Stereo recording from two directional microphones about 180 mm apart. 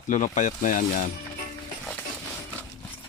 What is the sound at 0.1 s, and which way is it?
Speech, 40° left (ahead or behind).